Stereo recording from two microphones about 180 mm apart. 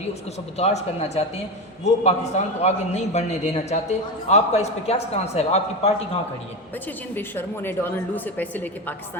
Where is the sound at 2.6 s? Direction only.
40° left (ahead or behind).